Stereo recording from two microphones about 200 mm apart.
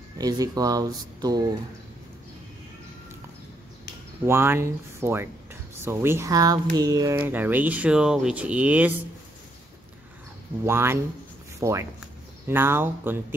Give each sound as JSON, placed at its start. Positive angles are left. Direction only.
{"t": 0.2, "sound": "speech", "side_deg": -20}
{"t": 4.2, "sound": "speech", "side_deg": -10}
{"t": 10.6, "sound": "speech", "side_deg": -10}